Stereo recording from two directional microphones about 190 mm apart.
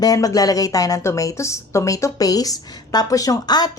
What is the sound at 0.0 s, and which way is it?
A woman's voice, 20° left (ahead or behind).